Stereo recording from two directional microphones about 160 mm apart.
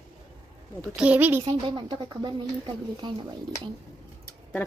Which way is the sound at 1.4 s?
30° right (ahead or behind).